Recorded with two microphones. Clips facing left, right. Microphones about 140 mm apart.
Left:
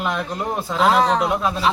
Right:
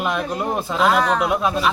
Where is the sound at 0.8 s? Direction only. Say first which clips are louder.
Left 1 dB; 25° left (ahead or behind).